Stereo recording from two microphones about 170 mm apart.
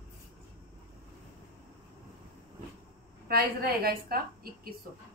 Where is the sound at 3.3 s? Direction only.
65° right (ahead or behind).